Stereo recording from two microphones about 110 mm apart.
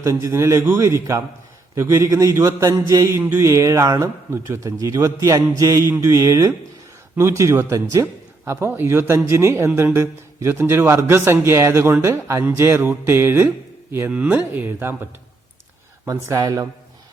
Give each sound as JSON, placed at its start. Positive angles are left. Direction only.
{"t": 0.0, "sound": "a man's voice", "side_deg": -25}
{"t": 16.0, "sound": "a man's voice", "side_deg": -30}